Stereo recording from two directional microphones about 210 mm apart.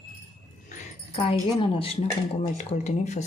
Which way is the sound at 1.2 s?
25° left (ahead or behind).